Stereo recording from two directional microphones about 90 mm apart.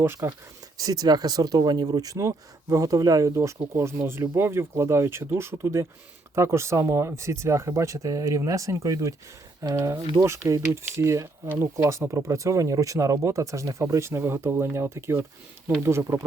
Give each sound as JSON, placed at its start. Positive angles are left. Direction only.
{"t": 0.0, "sound": "speech", "side_deg": -30}
{"t": 0.8, "sound": "speech", "side_deg": -45}